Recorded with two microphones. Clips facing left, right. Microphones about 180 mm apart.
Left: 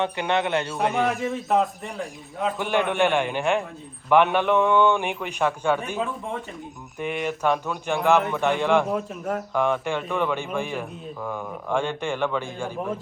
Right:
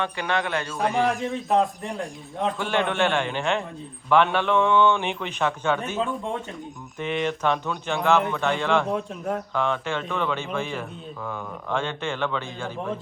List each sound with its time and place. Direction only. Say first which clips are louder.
0.0 s a man's voice: left 3 dB; 20° left (ahead or behind)
0.9 s a man's voice: even; centre (ahead or behind)
2.6 s speech: left 3 dB; 15° left (ahead or behind)
8.9 s a man's voice: even; 5° left (ahead or behind)
9.6 s speech: left 5 dB; 15° left (ahead or behind)